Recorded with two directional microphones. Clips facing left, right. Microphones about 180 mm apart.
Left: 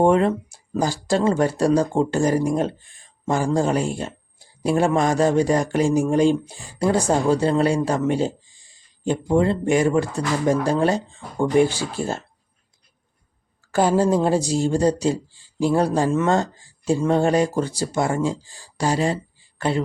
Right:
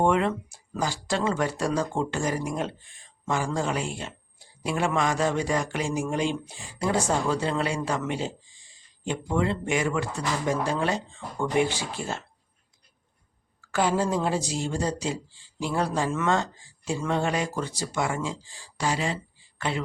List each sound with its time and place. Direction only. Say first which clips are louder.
0.0 s speech: left 6 dB; 35° left (ahead or behind)
13.7 s speech: left 7 dB; 40° left (ahead or behind)